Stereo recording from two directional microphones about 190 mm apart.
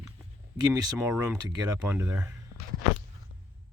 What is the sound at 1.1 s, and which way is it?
Speech, 5° right (ahead or behind).